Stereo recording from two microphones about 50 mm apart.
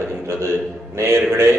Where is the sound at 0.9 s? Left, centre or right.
Right.